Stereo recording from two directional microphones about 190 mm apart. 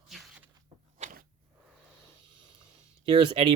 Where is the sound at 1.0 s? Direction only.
45° right (ahead or behind).